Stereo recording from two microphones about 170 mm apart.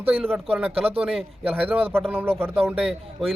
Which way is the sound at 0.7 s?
35° right (ahead or behind).